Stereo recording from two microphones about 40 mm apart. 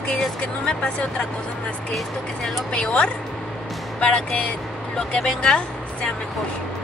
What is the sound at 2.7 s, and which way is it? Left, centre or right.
Speech, left.